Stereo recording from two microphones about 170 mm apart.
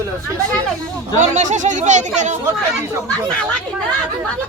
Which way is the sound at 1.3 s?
45° right (ahead or behind).